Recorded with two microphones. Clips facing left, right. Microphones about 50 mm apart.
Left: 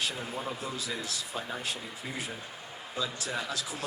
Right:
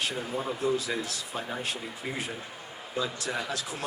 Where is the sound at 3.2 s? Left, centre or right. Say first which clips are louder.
Right 2 dB; right.